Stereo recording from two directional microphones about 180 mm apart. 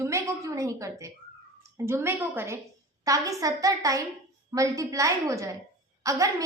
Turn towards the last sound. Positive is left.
turn(degrees=-20)  # may be behind; listen again after turning